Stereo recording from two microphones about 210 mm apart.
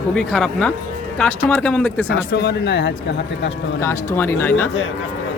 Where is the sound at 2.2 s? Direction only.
55° left (ahead or behind).